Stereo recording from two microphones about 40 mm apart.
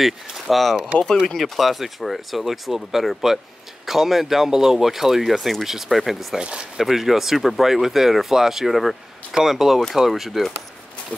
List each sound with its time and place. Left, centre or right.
0.0 s speech: centre
6.3 s speech: centre
6.8 s speech: centre